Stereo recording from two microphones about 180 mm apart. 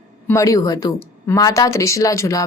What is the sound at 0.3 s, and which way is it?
Speech, 15° left (ahead or behind).